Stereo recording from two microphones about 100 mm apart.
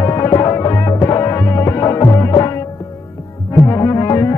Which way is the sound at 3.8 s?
30° left (ahead or behind).